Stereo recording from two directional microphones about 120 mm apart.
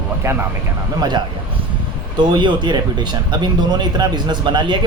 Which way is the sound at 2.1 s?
40° right (ahead or behind).